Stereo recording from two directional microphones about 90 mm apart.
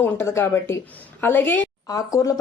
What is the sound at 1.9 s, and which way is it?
Speech, 40° left (ahead or behind).